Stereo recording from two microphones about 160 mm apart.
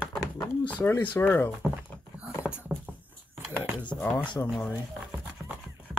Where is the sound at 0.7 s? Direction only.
10° left (ahead or behind).